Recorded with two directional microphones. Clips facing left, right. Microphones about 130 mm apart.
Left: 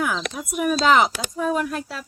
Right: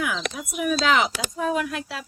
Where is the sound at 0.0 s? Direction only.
40° left (ahead or behind).